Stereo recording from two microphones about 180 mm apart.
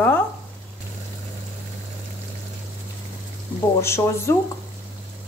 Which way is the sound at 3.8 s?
15° left (ahead or behind).